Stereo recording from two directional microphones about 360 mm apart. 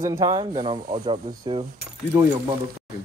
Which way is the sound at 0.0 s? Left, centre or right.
Centre.